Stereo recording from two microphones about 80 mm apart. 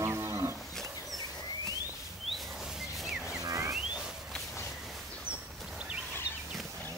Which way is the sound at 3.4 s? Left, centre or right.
Right.